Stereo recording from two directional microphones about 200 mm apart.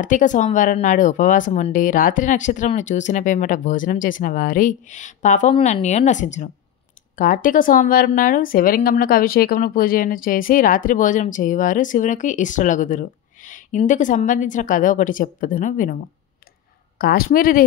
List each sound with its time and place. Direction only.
0.0 s a woman's voice: 40° left (ahead or behind)
17.0 s a woman's voice: 50° left (ahead or behind)